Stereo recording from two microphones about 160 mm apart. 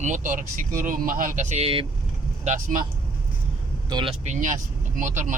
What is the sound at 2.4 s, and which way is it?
Speech, 50° right (ahead or behind).